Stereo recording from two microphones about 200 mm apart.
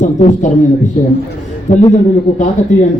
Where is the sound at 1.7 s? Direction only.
35° left (ahead or behind).